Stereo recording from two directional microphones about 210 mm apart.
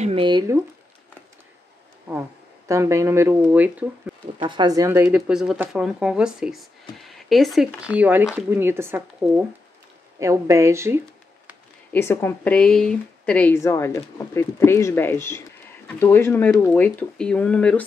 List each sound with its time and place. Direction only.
0.0 s speech: 25° right (ahead or behind)
2.7 s speech: 15° right (ahead or behind)
4.4 s speech: 20° right (ahead or behind)
11.9 s speech: 10° left (ahead or behind)